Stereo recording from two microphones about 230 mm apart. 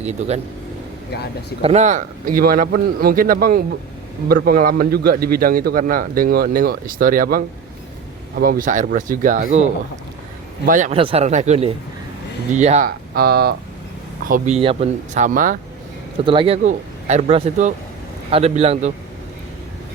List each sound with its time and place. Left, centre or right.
0.0 s speech: right
1.1 s speech: left
1.6 s a man's voice: right
10.7 s a man's voice: right
14.3 s a man's voice: right
16.2 s a man's voice: right